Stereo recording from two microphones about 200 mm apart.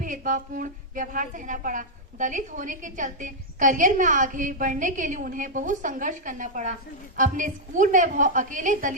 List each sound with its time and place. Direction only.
0.0 s a woman's voice: 40° right (ahead or behind)